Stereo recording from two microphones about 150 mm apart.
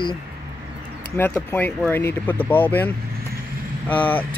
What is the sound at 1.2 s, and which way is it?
Speech, 15° left (ahead or behind).